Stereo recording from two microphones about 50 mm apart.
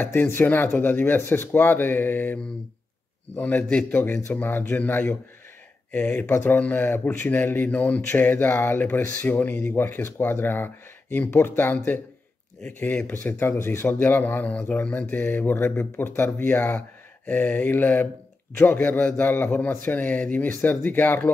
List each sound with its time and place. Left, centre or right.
0.0 s a man's voice: left
3.3 s a man's voice: left
5.9 s speech: left
6.2 s speech: left
6.5 s a man's voice: left
9.8 s speech: left
12.7 s speech: left
14.5 s a man's voice: left
15.5 s a man's voice: left